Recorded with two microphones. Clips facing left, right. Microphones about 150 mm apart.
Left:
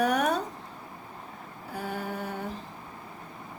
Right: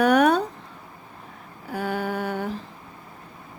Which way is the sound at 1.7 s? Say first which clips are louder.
Right 7 dB; 75° right (ahead or behind).